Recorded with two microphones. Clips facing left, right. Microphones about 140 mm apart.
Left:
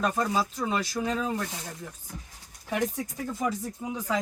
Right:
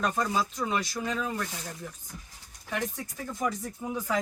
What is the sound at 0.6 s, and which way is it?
Speech, 10° left (ahead or behind).